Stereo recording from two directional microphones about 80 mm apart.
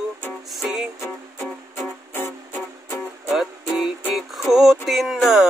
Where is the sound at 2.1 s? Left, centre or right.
Left.